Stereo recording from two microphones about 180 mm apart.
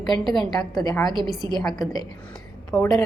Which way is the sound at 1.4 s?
20° left (ahead or behind).